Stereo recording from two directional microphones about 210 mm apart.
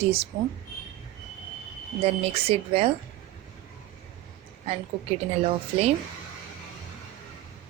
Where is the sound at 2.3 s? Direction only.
30° right (ahead or behind).